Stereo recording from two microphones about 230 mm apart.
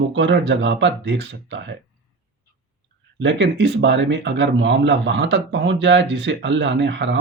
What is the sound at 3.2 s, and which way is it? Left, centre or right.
Speech, right.